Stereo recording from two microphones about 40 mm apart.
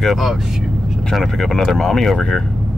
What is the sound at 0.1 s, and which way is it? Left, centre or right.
Speech, centre.